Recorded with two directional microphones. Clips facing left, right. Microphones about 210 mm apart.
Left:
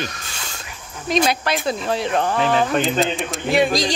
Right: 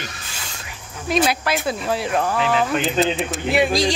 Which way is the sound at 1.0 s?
5° right (ahead or behind).